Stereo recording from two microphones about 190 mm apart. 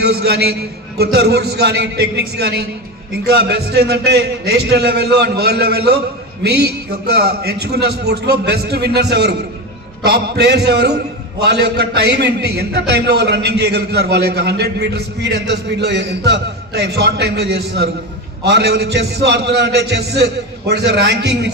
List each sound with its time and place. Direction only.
0.0 s a man's voice: 55° right (ahead or behind)